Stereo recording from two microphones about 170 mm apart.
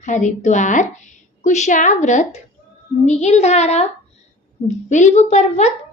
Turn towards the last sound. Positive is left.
turn(degrees=40)  # may be behind; listen again after turning